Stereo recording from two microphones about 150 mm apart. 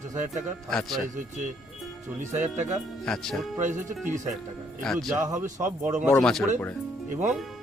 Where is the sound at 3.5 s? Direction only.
55° right (ahead or behind).